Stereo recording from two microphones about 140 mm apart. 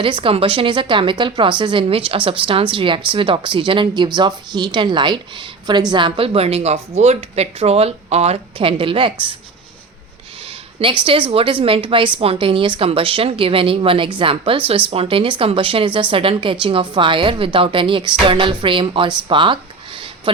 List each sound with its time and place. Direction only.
0.0 s a woman's voice: 40° right (ahead or behind)
11.0 s a woman's voice: 40° right (ahead or behind)
19.3 s a sound: 35° right (ahead or behind)